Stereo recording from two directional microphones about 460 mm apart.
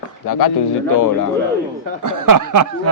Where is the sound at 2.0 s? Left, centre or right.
Right.